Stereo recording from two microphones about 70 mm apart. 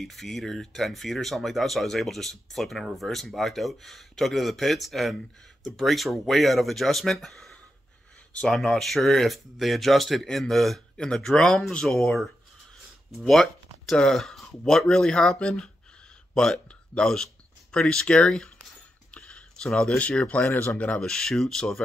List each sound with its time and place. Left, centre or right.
0.0 s speech: centre
19.1 s a sound: centre
20.0 s speech: centre
21.0 s speech: centre